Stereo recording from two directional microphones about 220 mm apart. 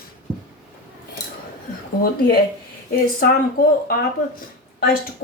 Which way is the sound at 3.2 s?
45° left (ahead or behind).